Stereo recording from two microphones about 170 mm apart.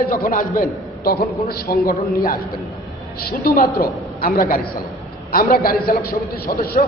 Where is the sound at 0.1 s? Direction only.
55° left (ahead or behind).